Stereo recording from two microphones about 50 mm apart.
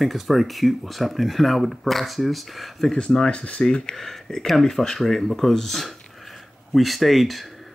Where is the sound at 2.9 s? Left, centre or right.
Centre.